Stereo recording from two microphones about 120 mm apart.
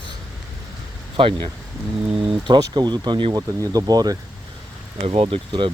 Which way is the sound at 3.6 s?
30° right (ahead or behind).